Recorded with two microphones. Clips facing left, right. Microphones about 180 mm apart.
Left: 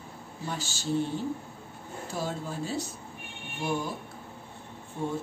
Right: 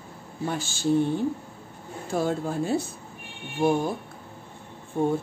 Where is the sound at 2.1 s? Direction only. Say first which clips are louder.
Right 8 dB; 55° right (ahead or behind).